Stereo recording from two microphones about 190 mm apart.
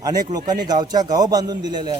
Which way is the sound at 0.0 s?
20° right (ahead or behind).